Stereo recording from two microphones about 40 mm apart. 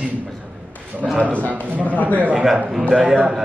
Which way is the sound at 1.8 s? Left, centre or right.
Left.